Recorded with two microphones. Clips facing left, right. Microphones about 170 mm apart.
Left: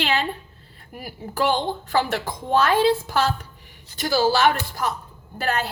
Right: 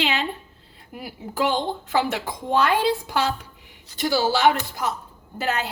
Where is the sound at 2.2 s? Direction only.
15° right (ahead or behind).